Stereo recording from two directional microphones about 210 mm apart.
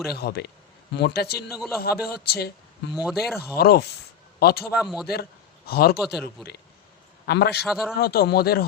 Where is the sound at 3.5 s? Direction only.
45° left (ahead or behind).